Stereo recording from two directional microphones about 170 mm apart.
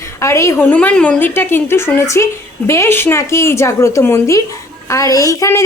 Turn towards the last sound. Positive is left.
turn(degrees=20)  # may be behind; listen again after turning